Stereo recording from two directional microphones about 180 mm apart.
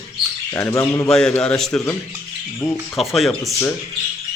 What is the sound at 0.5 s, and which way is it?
Speech, 15° left (ahead or behind).